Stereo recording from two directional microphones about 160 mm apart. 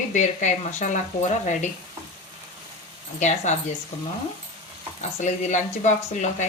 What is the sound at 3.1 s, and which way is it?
Speech, 45° left (ahead or behind).